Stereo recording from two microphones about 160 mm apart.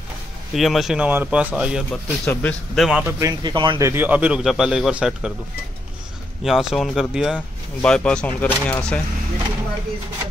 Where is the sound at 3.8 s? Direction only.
15° right (ahead or behind).